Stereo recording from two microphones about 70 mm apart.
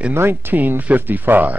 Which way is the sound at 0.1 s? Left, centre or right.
Right.